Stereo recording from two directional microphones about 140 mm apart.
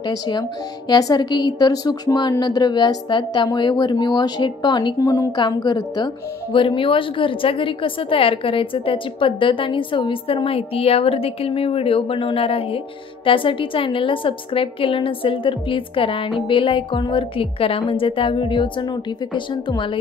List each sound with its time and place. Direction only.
0.0 s a woman's voice: 30° left (ahead or behind)